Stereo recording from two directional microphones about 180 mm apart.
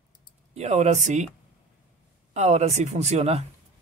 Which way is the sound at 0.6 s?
40° right (ahead or behind).